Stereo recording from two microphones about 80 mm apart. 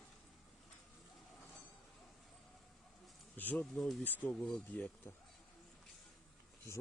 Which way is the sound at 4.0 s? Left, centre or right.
Left.